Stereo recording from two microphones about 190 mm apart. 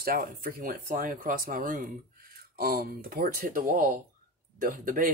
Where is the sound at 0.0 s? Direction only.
50° right (ahead or behind).